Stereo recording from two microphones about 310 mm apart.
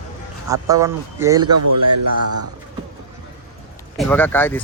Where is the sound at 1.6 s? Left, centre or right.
Right.